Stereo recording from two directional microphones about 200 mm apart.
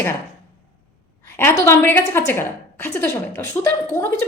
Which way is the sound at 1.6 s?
10° left (ahead or behind).